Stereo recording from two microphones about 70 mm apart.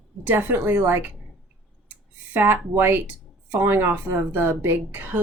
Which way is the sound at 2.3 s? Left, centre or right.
Right.